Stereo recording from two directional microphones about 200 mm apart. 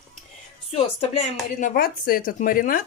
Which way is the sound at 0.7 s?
30° left (ahead or behind).